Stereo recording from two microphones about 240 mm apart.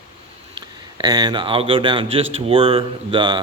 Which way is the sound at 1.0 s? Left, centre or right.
Centre.